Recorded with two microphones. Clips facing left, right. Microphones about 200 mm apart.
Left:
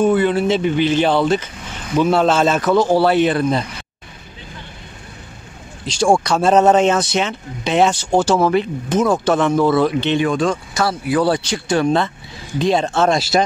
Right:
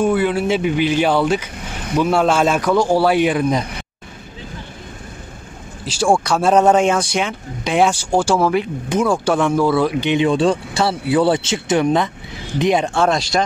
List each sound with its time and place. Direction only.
0.0 s speech: 10° right (ahead or behind)
5.9 s speech: 10° right (ahead or behind)
10.2 s speech: 30° right (ahead or behind); by 13.1 s 15° right (ahead or behind)
13.1 s speech: 5° left (ahead or behind)